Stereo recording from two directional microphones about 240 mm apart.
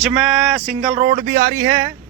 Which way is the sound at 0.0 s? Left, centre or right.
Centre.